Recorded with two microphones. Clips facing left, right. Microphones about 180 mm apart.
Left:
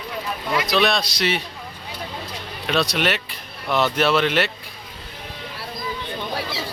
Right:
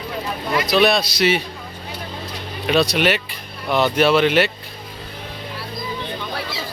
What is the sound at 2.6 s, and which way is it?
Speech, centre (ahead or behind).